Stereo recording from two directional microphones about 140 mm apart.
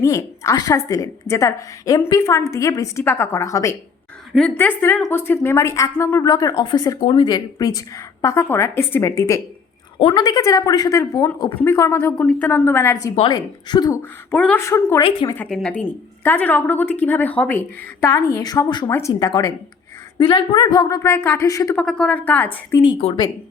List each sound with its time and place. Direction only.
0.0 s a woman's voice: 20° left (ahead or behind)
4.3 s a woman's voice: centre (ahead or behind)
5.0 s a woman's voice: 15° left (ahead or behind)
10.0 s a woman's voice: 35° left (ahead or behind)
14.3 s a woman's voice: 10° left (ahead or behind)
15.4 s a woman's voice: 5° left (ahead or behind)
18.0 s a woman's voice: 20° left (ahead or behind)
21.8 s a woman's voice: 5° left (ahead or behind)
22.8 s speech: 40° left (ahead or behind)